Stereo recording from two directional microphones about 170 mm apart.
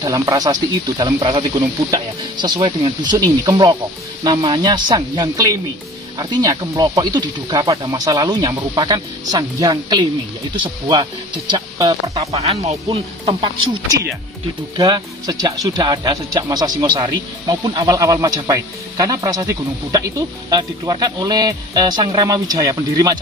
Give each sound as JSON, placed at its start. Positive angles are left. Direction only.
{"t": 0.0, "sound": "speech", "side_deg": -20}
{"t": 12.2, "sound": "speech", "side_deg": -35}
{"t": 14.8, "sound": "speech", "side_deg": -20}